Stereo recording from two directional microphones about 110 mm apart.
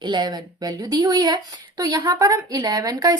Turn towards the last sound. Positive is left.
turn(degrees=-35)  # may be behind; listen again after turning